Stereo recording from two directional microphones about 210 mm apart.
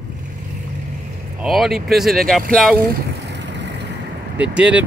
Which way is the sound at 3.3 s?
55° right (ahead or behind).